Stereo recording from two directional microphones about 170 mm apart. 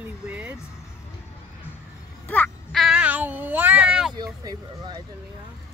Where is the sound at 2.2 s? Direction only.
10° left (ahead or behind).